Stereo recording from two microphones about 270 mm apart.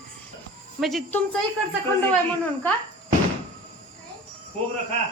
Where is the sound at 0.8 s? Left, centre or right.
Centre.